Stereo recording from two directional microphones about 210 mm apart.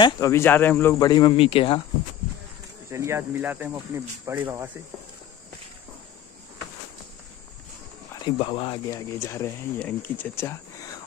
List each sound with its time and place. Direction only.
0.0 s speech: 15° left (ahead or behind)
2.9 s speech: 15° right (ahead or behind)
8.1 s speech: 20° left (ahead or behind)